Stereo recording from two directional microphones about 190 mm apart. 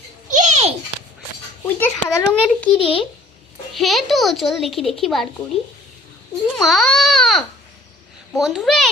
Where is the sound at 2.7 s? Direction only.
30° left (ahead or behind).